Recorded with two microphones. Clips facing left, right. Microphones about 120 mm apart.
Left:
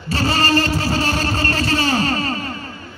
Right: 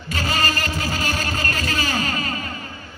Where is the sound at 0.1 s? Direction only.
35° left (ahead or behind).